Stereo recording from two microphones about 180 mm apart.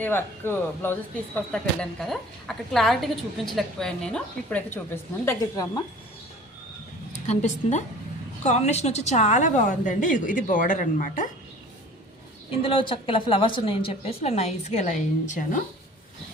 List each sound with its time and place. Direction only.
0.0 s a woman's voice: 10° left (ahead or behind)
7.3 s a woman's voice: 40° left (ahead or behind)
12.5 s a woman's voice: 30° left (ahead or behind)